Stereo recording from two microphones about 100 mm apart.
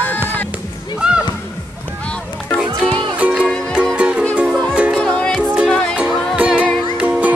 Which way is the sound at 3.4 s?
10° left (ahead or behind).